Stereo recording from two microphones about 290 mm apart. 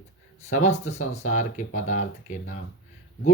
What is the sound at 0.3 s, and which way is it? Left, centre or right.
Speech, left.